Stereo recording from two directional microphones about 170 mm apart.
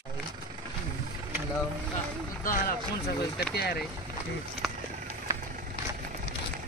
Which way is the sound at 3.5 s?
70° left (ahead or behind).